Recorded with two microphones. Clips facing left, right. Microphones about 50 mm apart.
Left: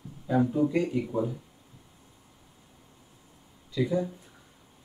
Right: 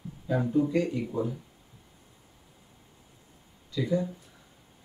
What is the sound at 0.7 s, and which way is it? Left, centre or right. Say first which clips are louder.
Speech: left 1 dB; centre.